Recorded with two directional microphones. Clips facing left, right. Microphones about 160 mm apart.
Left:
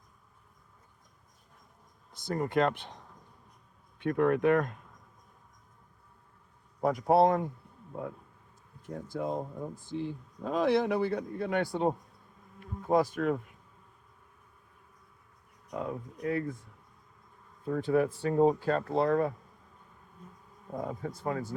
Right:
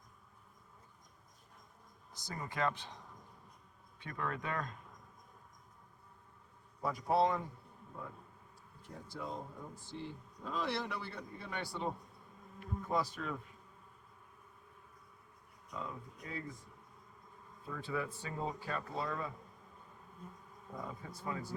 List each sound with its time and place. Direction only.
2.2 s speech: 55° left (ahead or behind)
3.9 s speech: 60° left (ahead or behind)
6.8 s speech: 60° left (ahead or behind)
9.0 s speech: 50° left (ahead or behind)
15.7 s speech: 60° left (ahead or behind)
17.7 s speech: 55° left (ahead or behind)
20.7 s speech: 55° left (ahead or behind)